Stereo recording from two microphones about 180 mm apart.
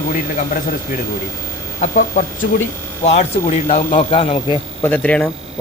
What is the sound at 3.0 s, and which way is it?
Speech, 40° left (ahead or behind).